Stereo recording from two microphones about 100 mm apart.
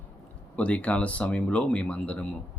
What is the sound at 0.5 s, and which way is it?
Speech, 15° left (ahead or behind).